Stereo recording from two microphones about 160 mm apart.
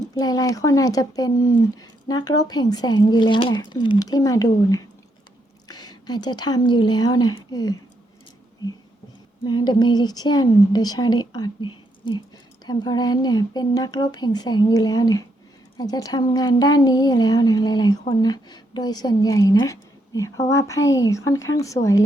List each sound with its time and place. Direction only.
0.2 s speech: 25° left (ahead or behind)
9.4 s speech: 30° left (ahead or behind)